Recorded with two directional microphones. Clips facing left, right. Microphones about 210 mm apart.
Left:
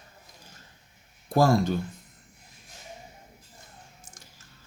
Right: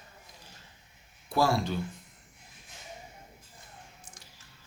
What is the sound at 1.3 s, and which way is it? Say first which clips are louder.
Speech: left 5 dB; 45° left (ahead or behind).